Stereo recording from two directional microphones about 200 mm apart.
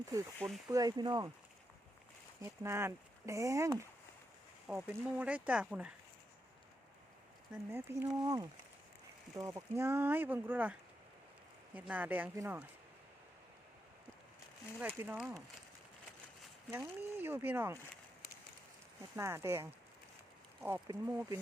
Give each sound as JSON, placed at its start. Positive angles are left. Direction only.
{"t": 0.3, "sound": "speech", "side_deg": 0}
{"t": 0.7, "sound": "speech", "side_deg": -20}
{"t": 2.4, "sound": "speech", "side_deg": -15}
{"t": 4.6, "sound": "speech", "side_deg": -5}
{"t": 7.5, "sound": "speech", "side_deg": -10}
{"t": 14.8, "sound": "speech", "side_deg": -10}
{"t": 16.7, "sound": "speech", "side_deg": -10}
{"t": 19.1, "sound": "speech", "side_deg": -15}
{"t": 20.7, "sound": "speech", "side_deg": -10}